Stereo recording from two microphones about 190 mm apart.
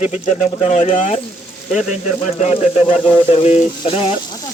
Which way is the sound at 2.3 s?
35° left (ahead or behind).